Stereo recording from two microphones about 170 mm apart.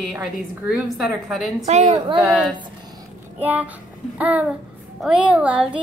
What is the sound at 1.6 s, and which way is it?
Speech, 45° right (ahead or behind).